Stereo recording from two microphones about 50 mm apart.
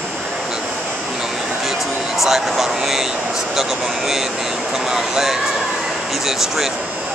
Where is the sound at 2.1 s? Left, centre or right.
Centre.